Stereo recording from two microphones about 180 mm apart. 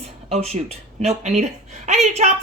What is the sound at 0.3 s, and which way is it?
Speech, 35° right (ahead or behind).